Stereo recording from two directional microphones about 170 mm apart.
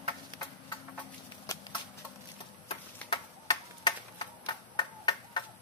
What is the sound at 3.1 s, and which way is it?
Tick-tock, 25° left (ahead or behind).